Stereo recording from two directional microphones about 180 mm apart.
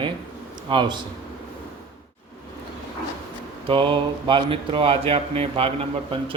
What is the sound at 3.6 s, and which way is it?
Speech, 25° right (ahead or behind).